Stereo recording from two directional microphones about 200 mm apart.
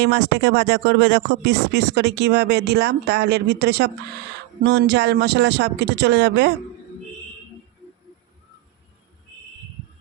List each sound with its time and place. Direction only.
0.0 s speech: 60° right (ahead or behind)